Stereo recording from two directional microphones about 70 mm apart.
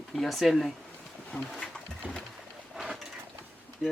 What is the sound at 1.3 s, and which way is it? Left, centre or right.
Speech, left.